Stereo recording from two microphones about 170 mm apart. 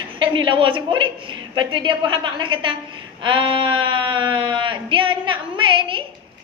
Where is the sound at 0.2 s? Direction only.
30° right (ahead or behind).